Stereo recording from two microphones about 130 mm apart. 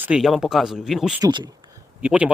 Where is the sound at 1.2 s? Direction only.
35° right (ahead or behind).